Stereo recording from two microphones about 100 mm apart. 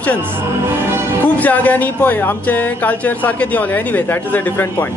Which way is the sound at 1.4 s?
15° left (ahead or behind).